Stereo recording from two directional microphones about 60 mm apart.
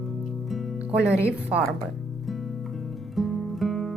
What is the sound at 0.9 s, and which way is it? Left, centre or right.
Speech, right.